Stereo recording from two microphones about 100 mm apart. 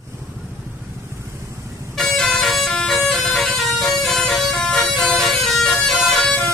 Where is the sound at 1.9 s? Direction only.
5° left (ahead or behind).